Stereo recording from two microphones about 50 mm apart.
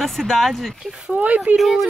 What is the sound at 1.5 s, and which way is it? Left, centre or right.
Speech, centre.